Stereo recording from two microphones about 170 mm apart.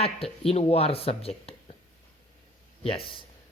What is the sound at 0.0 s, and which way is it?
Speech, 35° left (ahead or behind).